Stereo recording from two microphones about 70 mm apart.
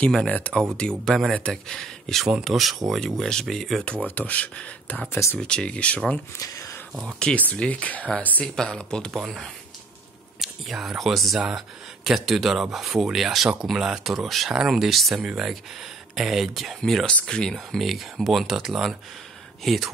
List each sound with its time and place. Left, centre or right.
0.3 s speech: centre
2.2 s speech: centre
4.0 s speech: left
6.4 s speech: left
7.1 s speech: centre
9.1 s speech: centre
17.6 s speech: centre